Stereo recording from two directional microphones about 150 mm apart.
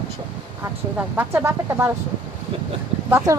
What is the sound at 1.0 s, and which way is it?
Speech, 15° right (ahead or behind).